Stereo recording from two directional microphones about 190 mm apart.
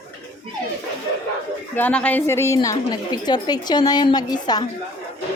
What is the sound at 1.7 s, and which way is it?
A woman's voice, 10° left (ahead or behind).